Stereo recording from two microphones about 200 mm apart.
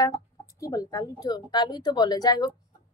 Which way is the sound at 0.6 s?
15° left (ahead or behind).